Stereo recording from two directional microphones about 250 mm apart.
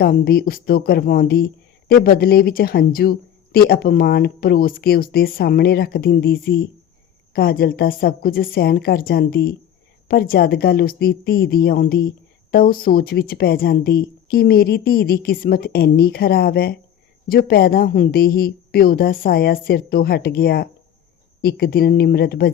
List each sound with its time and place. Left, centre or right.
0.0 s a woman's voice: left